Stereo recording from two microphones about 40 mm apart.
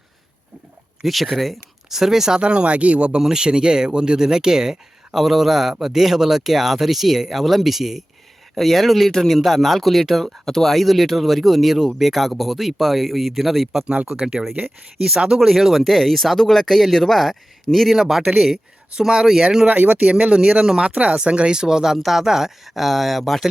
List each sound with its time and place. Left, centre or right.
1.0 s speech: centre
1.9 s speech: centre
2.4 s a man's voice: right
3.2 s speech: centre
13.8 s speech: right
14.4 s speech: centre
17.9 s speech: centre
19.6 s speech: right; by 23.5 s centre